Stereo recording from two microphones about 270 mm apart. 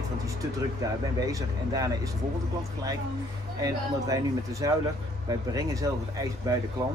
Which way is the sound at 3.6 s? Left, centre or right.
Centre.